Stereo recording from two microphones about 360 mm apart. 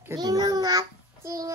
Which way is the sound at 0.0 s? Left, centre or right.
Centre.